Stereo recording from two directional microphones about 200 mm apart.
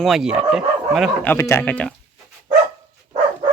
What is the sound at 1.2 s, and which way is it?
Speech, 10° left (ahead or behind).